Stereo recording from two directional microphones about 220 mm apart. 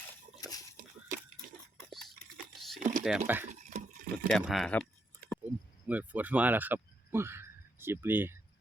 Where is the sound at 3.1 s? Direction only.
5° right (ahead or behind).